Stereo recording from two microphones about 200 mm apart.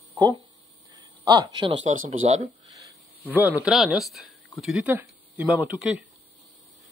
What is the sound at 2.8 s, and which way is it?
Speech, 10° right (ahead or behind).